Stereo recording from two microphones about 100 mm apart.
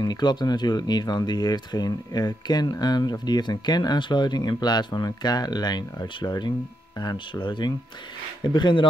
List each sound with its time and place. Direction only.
0.0 s speech: 45° left (ahead or behind)